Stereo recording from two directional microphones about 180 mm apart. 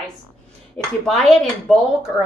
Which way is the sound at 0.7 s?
Centre (ahead or behind).